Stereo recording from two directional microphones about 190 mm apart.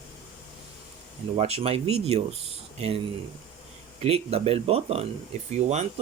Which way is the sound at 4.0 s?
30° right (ahead or behind).